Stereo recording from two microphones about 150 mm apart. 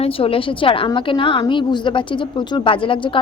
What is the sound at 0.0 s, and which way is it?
A woman's voice, 40° left (ahead or behind).